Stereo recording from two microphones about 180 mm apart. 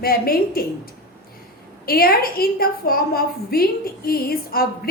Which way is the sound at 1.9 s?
55° left (ahead or behind).